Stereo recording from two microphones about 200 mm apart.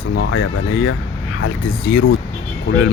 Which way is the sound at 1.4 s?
65° left (ahead or behind).